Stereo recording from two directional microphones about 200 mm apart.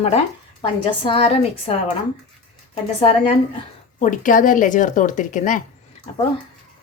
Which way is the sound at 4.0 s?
40° left (ahead or behind).